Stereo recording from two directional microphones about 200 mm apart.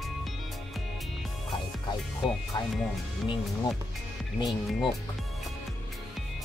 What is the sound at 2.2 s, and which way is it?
Speech, centre (ahead or behind).